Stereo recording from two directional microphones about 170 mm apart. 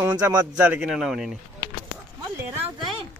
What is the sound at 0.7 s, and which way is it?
Speech, 5° right (ahead or behind).